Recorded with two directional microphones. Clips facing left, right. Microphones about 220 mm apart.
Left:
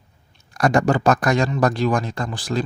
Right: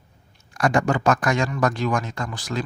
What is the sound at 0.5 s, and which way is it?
A man's voice, 35° left (ahead or behind).